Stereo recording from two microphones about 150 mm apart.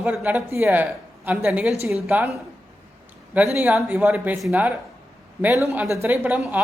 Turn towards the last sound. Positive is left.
turn(degrees=-10)  # may be behind; listen again after turning